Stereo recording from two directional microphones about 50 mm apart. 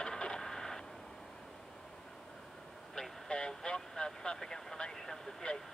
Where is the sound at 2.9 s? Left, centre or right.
Centre.